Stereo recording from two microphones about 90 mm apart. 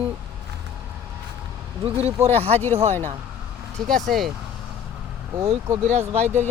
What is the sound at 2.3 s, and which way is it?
Speech, 20° left (ahead or behind).